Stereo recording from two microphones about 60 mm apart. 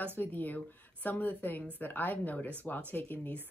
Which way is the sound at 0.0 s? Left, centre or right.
Left.